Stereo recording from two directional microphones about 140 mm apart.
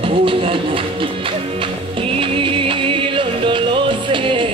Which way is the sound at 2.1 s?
40° right (ahead or behind).